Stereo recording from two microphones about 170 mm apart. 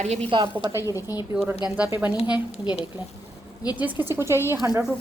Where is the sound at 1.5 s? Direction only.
5° right (ahead or behind).